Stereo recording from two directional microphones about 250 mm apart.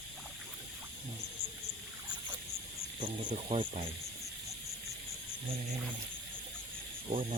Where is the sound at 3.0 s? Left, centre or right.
Right.